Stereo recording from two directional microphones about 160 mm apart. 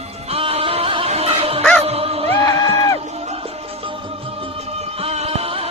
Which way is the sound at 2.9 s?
40° right (ahead or behind).